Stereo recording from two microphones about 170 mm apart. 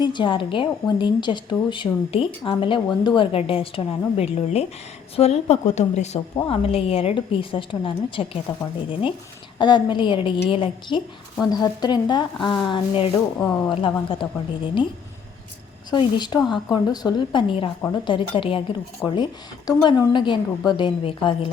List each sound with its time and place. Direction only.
0.0 s a woman's voice: 25° left (ahead or behind)
13.1 s speech: 10° left (ahead or behind)
13.7 s a woman's voice: 30° left (ahead or behind)
15.9 s a woman's voice: 25° left (ahead or behind)